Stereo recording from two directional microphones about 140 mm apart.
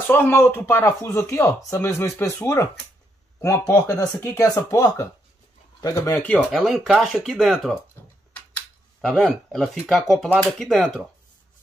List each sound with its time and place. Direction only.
0.1 s speech: 15° left (ahead or behind); by 7.8 s 5° right (ahead or behind)
9.0 s speech: 5° left (ahead or behind)